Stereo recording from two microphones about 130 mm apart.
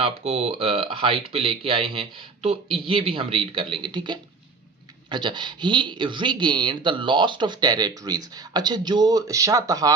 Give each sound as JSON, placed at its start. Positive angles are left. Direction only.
{"t": 0.0, "sound": "speech", "side_deg": -50}